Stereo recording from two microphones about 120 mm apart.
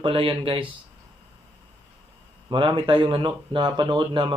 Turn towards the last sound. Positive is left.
turn(degrees=-40)  # may be behind; listen again after turning